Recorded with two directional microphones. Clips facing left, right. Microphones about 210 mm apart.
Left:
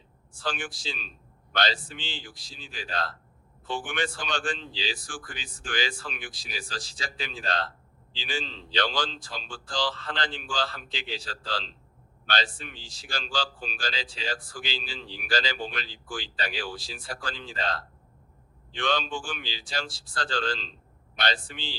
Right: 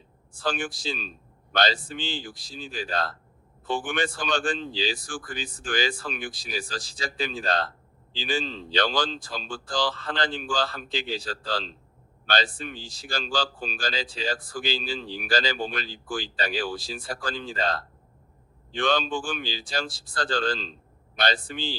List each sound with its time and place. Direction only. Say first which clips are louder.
0.4 s speech: right 5 dB; 40° right (ahead or behind)